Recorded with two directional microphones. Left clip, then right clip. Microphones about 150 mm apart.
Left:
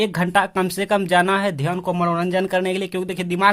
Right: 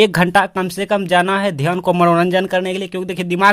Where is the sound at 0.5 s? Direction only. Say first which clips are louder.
Right 2 dB; 15° right (ahead or behind).